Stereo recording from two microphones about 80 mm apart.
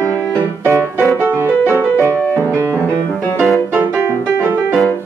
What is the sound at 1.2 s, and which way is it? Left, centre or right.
Music, right.